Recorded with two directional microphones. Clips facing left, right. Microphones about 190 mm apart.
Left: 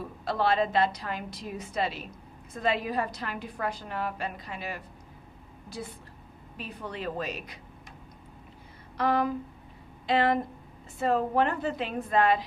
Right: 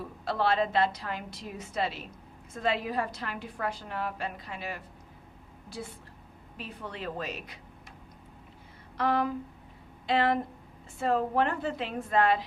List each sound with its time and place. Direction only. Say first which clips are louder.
0.3 s a woman's voice: left 1 dB; 15° left (ahead or behind)
6.6 s a woman's voice: left 2 dB; 15° left (ahead or behind)
9.0 s a woman's voice: left 2 dB; 15° left (ahead or behind)